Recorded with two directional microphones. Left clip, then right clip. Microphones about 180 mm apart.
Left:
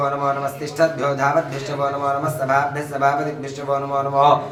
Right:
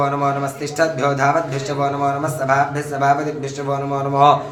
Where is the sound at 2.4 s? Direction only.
35° right (ahead or behind).